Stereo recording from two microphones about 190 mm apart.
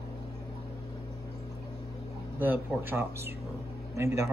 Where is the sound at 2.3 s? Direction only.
10° right (ahead or behind).